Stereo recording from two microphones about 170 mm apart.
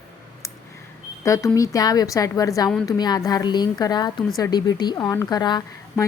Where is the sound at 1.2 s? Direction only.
20° left (ahead or behind).